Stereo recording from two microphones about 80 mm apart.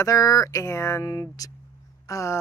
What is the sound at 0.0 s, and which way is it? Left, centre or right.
Speech, left.